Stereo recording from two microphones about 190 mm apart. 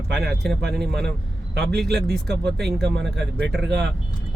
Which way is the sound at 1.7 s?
60° right (ahead or behind).